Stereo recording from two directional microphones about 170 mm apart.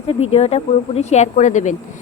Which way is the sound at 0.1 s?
35° left (ahead or behind).